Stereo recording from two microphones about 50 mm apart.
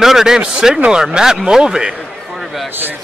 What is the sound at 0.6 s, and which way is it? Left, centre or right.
Speech, centre.